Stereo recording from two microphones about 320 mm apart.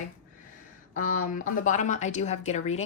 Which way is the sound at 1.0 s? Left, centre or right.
Left.